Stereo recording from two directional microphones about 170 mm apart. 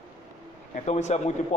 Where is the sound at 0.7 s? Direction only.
40° left (ahead or behind).